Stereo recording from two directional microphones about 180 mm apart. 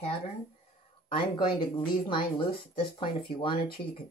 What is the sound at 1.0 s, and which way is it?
Speech, 30° left (ahead or behind).